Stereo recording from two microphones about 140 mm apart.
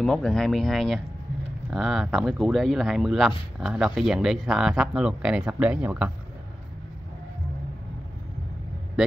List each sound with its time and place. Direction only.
0.0 s speech: 5° left (ahead or behind)